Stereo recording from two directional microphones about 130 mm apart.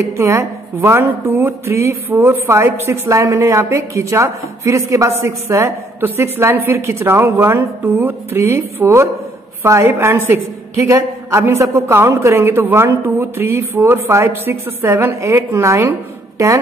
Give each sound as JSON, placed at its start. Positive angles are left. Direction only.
{"t": 0.2, "sound": "a woman's voice", "side_deg": -20}